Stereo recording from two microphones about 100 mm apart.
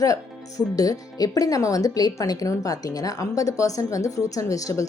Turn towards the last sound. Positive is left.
turn(degrees=35)  # may be behind; listen again after turning